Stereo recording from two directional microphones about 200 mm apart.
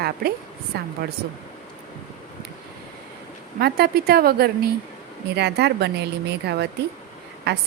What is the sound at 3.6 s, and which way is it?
A woman's voice, 50° right (ahead or behind).